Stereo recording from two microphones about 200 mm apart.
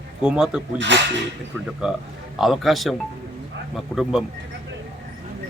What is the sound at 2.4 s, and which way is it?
Speech, centre (ahead or behind).